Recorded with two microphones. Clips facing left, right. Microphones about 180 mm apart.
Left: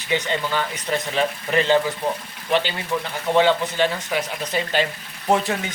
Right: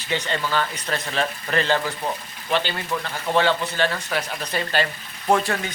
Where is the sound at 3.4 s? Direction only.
20° left (ahead or behind).